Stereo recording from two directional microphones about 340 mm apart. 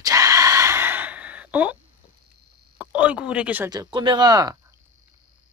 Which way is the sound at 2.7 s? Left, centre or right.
Centre.